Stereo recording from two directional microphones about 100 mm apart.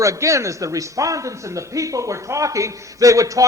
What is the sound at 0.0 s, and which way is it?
A man's voice, 30° right (ahead or behind).